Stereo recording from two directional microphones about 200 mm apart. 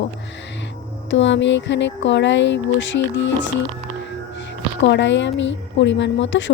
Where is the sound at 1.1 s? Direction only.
65° left (ahead or behind).